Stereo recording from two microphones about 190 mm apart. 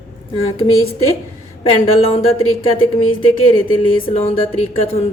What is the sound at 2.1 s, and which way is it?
A woman's voice, 30° left (ahead or behind).